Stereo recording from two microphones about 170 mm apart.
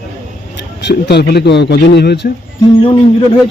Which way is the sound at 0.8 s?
80° left.